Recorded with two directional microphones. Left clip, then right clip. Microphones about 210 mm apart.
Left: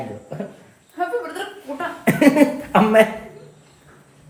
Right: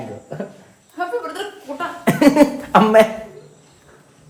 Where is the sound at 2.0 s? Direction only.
5° right (ahead or behind).